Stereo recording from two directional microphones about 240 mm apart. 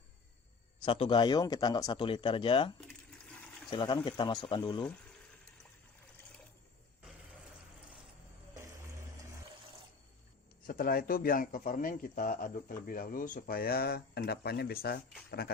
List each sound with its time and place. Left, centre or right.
0.9 s speech: left
10.7 s speech: left